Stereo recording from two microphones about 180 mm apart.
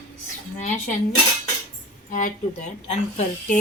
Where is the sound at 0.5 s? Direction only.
40° left (ahead or behind).